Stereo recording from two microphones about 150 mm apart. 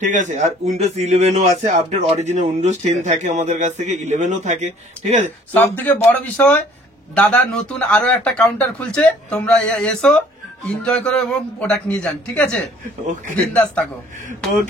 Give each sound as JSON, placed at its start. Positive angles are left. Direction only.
{"t": 0.0, "sound": "a man's voice", "side_deg": -55}
{"t": 5.5, "sound": "speech", "side_deg": 10}